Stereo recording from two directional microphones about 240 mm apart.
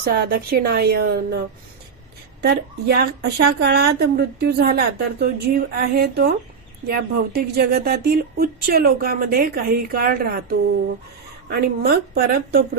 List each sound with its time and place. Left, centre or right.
0.0 s a woman's voice: right
2.4 s a woman's voice: right